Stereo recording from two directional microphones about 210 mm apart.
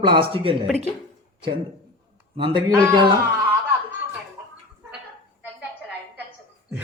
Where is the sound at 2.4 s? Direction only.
25° right (ahead or behind).